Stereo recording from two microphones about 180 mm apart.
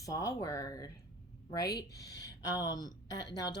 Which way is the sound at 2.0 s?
65° left (ahead or behind).